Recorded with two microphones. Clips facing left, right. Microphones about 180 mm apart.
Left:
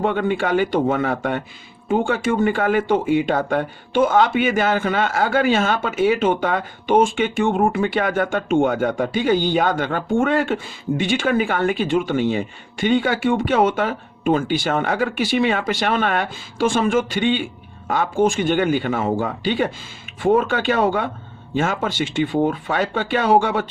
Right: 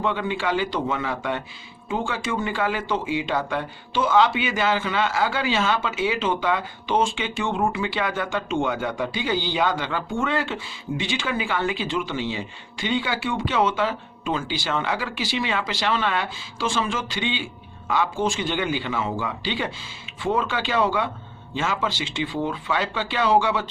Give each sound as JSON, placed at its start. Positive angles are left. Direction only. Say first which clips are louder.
{"t": 0.0, "sound": "a man's voice", "louder": "left 5 dB", "side_deg": 55}